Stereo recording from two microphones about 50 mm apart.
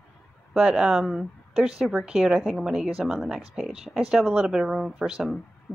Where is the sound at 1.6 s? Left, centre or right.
Centre.